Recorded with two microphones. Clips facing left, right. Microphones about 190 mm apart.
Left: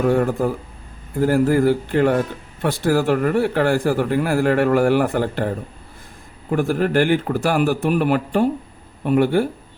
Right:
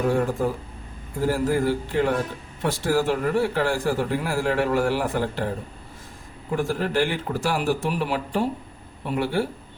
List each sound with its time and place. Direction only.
0.1 s speech: 60° left (ahead or behind)
6.5 s speech: 60° left (ahead or behind)